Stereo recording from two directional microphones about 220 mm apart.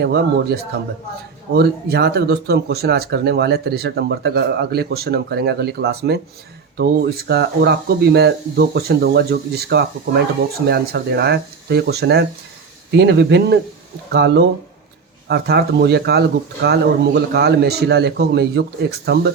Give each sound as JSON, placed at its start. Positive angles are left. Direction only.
{"t": 0.0, "sound": "speech", "side_deg": -45}